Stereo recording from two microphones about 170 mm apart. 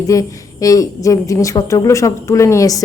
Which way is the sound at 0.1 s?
20° left (ahead or behind).